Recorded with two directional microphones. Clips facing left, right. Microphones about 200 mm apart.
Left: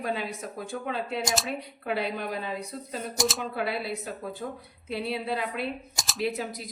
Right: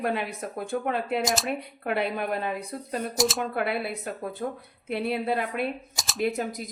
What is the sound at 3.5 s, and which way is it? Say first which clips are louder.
A woman's voice: right 2 dB; 55° right (ahead or behind).